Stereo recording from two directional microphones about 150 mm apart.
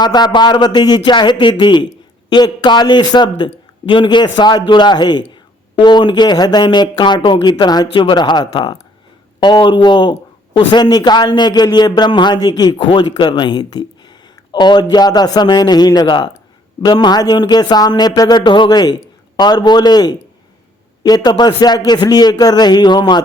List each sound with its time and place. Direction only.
0.0 s a man's voice: 30° left (ahead or behind)